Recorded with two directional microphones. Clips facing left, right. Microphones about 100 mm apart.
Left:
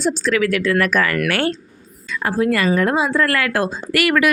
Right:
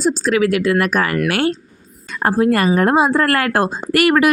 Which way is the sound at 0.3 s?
25° right (ahead or behind).